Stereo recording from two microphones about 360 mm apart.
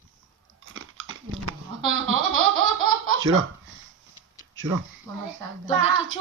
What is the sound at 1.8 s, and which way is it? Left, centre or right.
Baby laughter, right.